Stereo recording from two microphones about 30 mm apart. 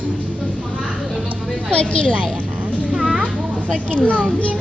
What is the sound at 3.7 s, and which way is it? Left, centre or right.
Speech, right.